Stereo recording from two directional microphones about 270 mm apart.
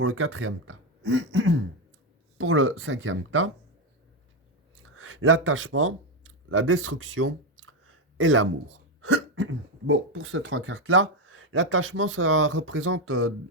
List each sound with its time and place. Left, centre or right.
0.0 s speech: right
4.8 s a sound: right
9.0 s speech: right